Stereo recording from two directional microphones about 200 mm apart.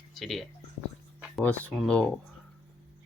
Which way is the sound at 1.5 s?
5° left (ahead or behind).